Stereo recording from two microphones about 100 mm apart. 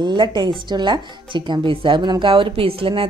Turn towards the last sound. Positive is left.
turn(degrees=-65)  # may be behind; listen again after turning